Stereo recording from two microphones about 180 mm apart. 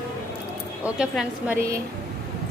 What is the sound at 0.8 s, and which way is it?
Speech, 5° right (ahead or behind).